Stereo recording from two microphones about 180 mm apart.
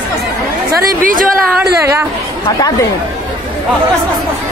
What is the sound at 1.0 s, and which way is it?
Speech, 50° right (ahead or behind).